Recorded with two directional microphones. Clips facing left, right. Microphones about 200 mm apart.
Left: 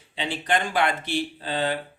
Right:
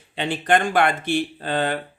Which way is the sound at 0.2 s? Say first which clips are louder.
Right 5 dB; 55° right (ahead or behind).